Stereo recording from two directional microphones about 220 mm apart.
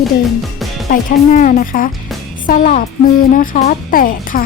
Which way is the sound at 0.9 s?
35° left (ahead or behind).